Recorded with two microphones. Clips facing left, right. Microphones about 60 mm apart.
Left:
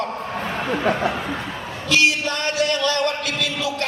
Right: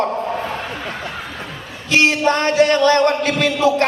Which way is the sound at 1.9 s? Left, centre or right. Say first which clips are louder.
Right 4 dB; right.